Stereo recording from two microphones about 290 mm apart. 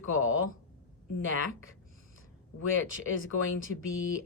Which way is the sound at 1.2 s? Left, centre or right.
Left.